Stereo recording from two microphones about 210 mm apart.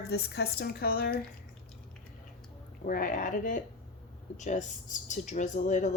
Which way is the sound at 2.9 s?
40° left (ahead or behind).